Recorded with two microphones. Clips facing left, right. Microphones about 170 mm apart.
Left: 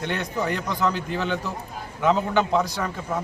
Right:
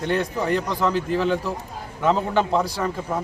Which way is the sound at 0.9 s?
Centre (ahead or behind).